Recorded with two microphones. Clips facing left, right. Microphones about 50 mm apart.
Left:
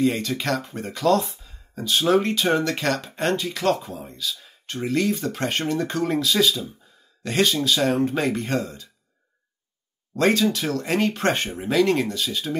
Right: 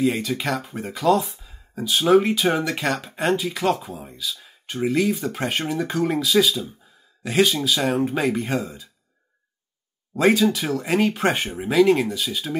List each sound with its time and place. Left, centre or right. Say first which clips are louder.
0.0 s speech: even; centre
10.1 s speech: right 2 dB; centre